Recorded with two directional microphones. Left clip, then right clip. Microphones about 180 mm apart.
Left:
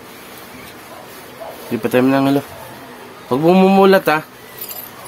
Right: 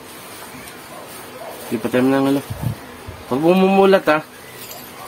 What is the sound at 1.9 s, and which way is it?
Speech, 80° left.